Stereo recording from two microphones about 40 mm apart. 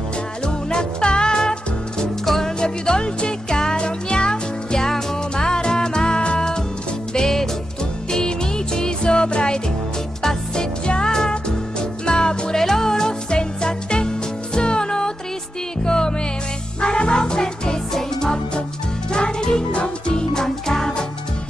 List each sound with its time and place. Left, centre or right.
0.5 s music: left
7.2 s music: centre